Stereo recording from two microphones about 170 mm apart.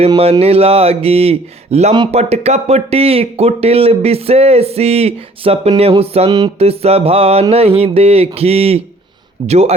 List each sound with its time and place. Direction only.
0.2 s speech: 35° right (ahead or behind)